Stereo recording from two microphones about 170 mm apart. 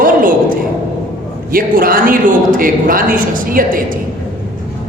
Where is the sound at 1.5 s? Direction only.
55° right (ahead or behind).